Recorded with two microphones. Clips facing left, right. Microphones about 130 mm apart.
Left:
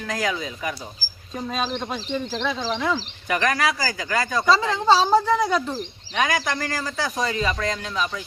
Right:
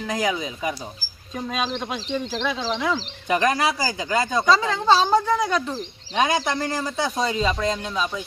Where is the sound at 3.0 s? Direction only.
25° right (ahead or behind).